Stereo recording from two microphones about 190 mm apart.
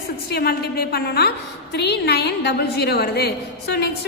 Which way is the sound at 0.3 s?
55° left (ahead or behind).